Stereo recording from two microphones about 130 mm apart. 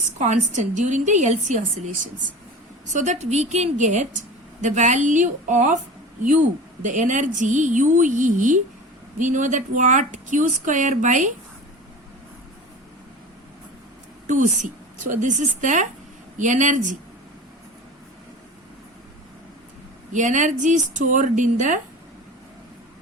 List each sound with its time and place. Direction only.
0.2 s speech: 65° right (ahead or behind)
2.9 s a woman's voice: 65° right (ahead or behind)
6.8 s speech: 75° right (ahead or behind)
14.3 s speech: 75° right (ahead or behind)
20.1 s speech: 75° right (ahead or behind)